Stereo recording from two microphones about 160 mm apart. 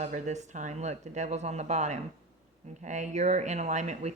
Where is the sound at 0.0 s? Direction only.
45° right (ahead or behind).